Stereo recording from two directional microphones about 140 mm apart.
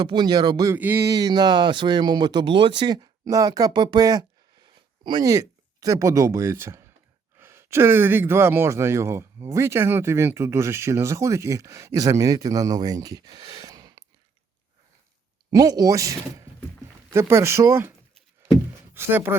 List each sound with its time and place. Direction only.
0.0 s speech: 30° right (ahead or behind)
15.4 s speech: 25° right (ahead or behind)
18.9 s speech: 15° right (ahead or behind)